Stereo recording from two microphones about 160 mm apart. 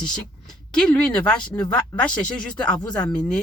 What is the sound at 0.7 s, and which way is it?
Speech, 5° left (ahead or behind).